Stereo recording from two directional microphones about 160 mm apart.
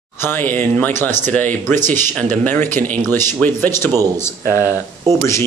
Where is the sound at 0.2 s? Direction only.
15° left (ahead or behind).